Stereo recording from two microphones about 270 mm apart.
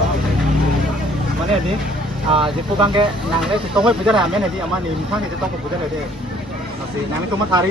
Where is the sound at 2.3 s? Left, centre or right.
Centre.